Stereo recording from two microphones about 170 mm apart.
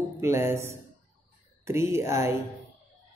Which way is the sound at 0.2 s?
15° right (ahead or behind).